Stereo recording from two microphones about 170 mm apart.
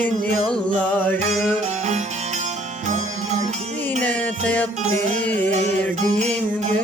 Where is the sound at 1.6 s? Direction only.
45° right (ahead or behind).